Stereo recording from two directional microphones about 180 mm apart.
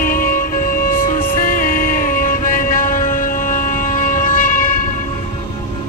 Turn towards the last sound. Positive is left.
turn(degrees=50)  # may be behind; listen again after turning